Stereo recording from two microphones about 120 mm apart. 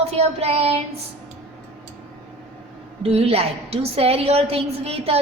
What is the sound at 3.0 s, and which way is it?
A woman's voice, 55° right (ahead or behind).